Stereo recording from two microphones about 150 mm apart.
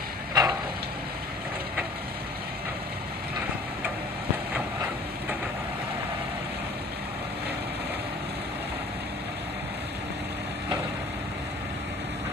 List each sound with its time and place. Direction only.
0.3 s vehicle: 25° right (ahead or behind)